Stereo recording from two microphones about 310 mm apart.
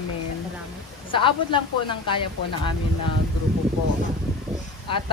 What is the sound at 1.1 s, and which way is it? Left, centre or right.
Speech, centre.